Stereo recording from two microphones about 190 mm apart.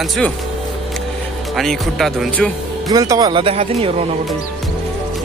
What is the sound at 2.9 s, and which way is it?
Speech, 20° right (ahead or behind).